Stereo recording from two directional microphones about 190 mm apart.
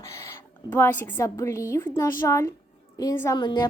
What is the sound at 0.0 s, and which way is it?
A woman's voice, 15° left (ahead or behind).